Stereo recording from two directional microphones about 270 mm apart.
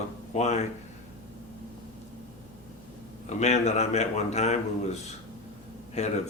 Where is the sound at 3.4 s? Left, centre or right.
Left.